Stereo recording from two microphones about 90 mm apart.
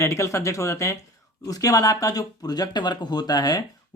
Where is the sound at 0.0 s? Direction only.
30° left (ahead or behind).